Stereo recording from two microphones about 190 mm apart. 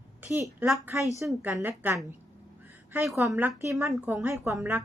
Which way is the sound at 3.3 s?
15° right (ahead or behind).